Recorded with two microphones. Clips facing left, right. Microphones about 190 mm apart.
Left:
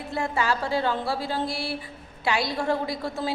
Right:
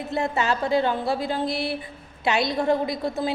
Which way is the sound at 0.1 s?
20° right (ahead or behind).